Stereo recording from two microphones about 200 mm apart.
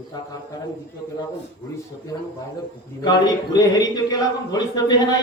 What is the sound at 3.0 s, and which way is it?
Speech, 20° left (ahead or behind).